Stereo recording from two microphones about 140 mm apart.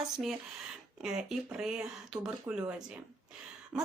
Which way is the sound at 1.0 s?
5° right (ahead or behind).